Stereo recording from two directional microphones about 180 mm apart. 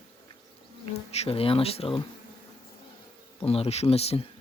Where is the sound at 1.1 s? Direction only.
35° left (ahead or behind).